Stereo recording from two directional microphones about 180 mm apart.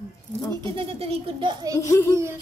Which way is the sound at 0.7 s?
30° right (ahead or behind).